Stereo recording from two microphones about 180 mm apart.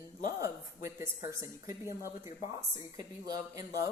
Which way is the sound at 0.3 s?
15° right (ahead or behind).